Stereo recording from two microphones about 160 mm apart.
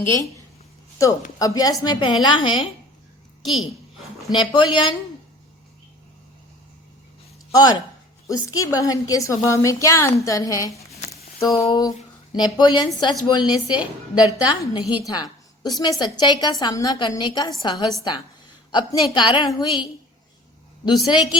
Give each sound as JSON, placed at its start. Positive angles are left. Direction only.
{"t": 1.4, "sound": "a woman's voice", "side_deg": 20}
{"t": 3.4, "sound": "a woman's voice", "side_deg": 0}
{"t": 4.4, "sound": "a woman's voice", "side_deg": 30}
{"t": 7.5, "sound": "a woman's voice", "side_deg": 25}